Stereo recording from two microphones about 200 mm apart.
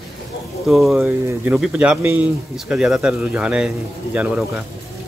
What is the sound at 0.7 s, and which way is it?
Speech, centre (ahead or behind).